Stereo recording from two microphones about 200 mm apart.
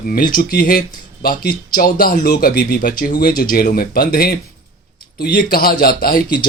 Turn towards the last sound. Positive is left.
turn(degrees=50)  # may be behind; listen again after turning